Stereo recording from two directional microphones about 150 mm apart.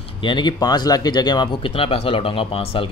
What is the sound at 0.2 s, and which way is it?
A man's voice, 30° left (ahead or behind).